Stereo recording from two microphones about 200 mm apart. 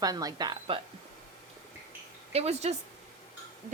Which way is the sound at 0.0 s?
20° right (ahead or behind).